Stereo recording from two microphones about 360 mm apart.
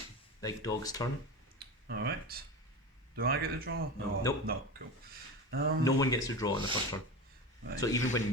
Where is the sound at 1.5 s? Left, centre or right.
Right.